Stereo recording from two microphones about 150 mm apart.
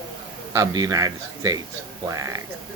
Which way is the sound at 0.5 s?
25° right (ahead or behind).